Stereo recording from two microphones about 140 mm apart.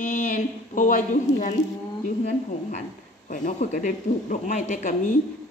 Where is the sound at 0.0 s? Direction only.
65° left (ahead or behind).